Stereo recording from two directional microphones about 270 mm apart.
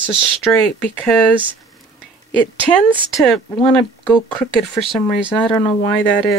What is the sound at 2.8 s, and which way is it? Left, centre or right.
Speech, centre.